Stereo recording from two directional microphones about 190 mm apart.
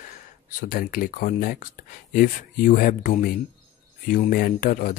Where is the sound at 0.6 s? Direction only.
45° left (ahead or behind).